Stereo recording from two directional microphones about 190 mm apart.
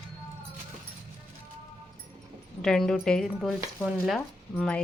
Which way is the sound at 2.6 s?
5° left (ahead or behind).